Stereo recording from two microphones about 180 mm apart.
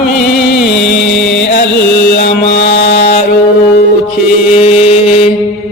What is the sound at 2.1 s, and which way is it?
Mantra, 65° left (ahead or behind).